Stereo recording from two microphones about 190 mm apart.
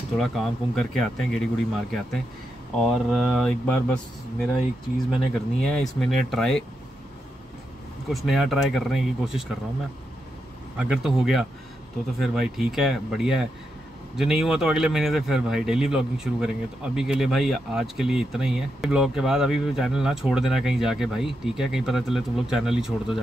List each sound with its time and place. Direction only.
0.2 s speech: centre (ahead or behind)
5.1 s speech: 5° left (ahead or behind)
8.1 s speech: centre (ahead or behind)
10.8 s speech: 5° right (ahead or behind)